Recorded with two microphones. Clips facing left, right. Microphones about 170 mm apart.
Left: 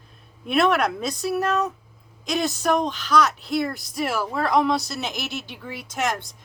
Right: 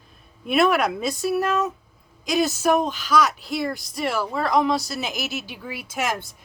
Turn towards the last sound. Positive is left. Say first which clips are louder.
# even
turn(degrees=-5)  # may be behind; listen again after turning